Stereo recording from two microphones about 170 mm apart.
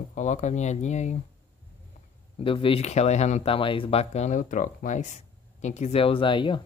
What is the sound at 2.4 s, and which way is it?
Speech, 30° left (ahead or behind).